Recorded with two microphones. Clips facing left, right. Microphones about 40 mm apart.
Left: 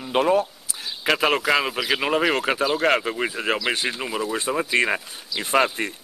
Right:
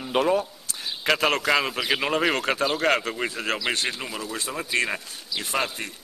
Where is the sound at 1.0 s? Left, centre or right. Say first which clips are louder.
Left 2 dB; centre.